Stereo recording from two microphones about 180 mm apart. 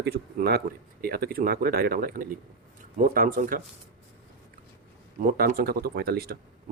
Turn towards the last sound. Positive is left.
turn(degrees=-60)  # may be behind; listen again after turning